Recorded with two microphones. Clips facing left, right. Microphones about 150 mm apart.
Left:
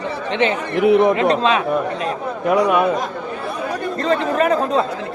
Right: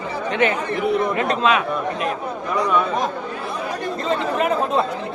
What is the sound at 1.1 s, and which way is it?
Speech, 30° left (ahead or behind).